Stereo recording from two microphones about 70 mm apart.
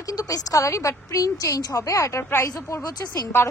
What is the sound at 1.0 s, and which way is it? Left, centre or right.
A woman's voice, left.